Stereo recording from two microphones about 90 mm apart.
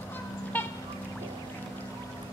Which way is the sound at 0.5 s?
20° left (ahead or behind).